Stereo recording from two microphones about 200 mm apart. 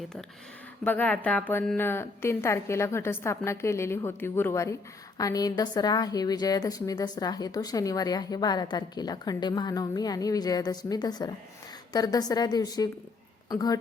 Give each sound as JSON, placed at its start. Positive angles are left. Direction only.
{"t": 0.9, "sound": "a woman's voice", "side_deg": 10}